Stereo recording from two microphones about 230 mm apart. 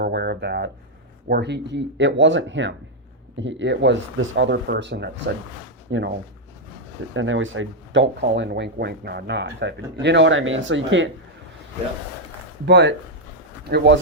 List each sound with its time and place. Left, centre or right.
0.0 s speech: right
12.6 s speech: right